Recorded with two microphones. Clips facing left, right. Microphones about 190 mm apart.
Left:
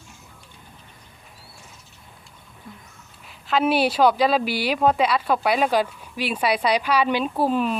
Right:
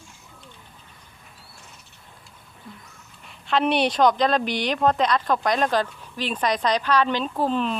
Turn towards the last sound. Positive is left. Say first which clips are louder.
# left 2 dB
turn(degrees=10)  # may be behind; listen again after turning